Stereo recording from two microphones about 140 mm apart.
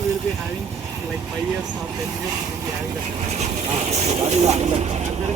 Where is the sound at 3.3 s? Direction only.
50° right (ahead or behind).